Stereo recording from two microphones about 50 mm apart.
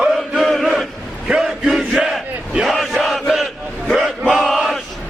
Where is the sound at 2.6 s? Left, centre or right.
Centre.